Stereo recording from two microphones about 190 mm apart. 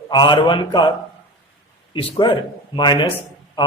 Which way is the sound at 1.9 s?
25° left (ahead or behind).